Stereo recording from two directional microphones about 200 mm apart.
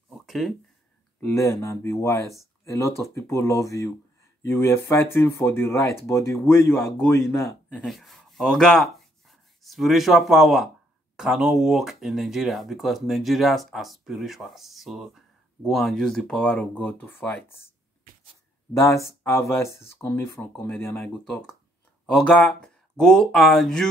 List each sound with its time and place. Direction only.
0.1 s a sound: centre (ahead or behind)
1.2 s speech: 15° left (ahead or behind)
7.3 s speech: 15° left (ahead or behind)
7.8 s speech: centre (ahead or behind)
18.7 s speech: 15° left (ahead or behind)